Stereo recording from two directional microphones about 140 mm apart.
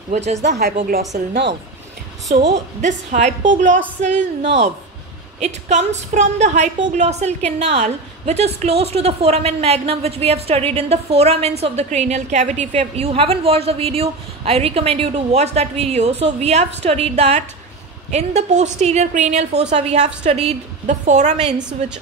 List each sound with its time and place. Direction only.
0.1 s a woman's voice: 55° right (ahead or behind)
0.6 s a woman's voice: 90° right
2.3 s a woman's voice: 90° right
2.8 s a woman's voice: 60° right (ahead or behind)